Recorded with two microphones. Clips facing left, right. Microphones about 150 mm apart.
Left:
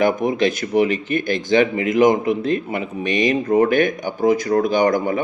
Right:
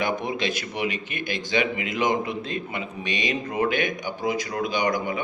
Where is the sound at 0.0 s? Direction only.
45° left (ahead or behind).